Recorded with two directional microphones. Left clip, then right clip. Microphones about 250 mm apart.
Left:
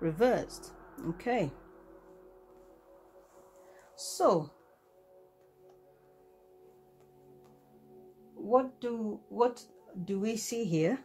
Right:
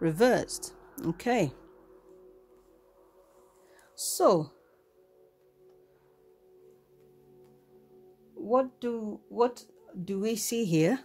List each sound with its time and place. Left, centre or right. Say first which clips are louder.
0.0 s speech: right 4 dB; right
3.9 s speech: right 3 dB; right
8.5 s speech: right 1 dB; right